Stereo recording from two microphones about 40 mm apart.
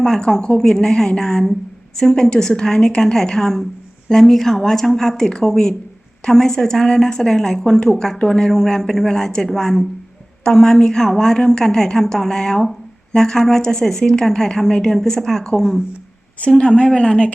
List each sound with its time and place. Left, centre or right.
0.0 s a woman's voice: centre
16.4 s speech: left